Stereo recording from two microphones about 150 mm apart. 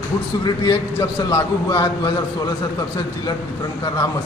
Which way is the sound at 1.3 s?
25° left (ahead or behind).